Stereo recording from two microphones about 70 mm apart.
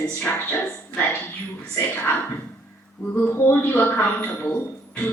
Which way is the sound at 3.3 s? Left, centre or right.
Left.